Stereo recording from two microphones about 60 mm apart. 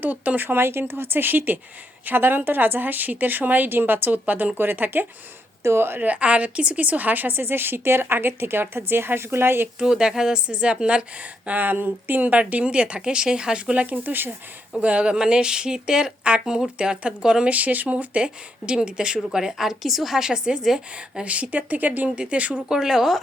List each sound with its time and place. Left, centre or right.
0.0 s speech: right
6.1 s speech: right
9.8 s a woman's voice: centre; by 14.3 s right
14.8 s speech: centre
17.5 s speech: right; by 21.2 s centre
21.2 s a woman's voice: right
22.7 s speech: centre